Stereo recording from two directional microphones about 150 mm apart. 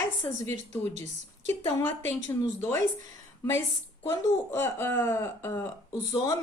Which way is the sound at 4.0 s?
15° left (ahead or behind).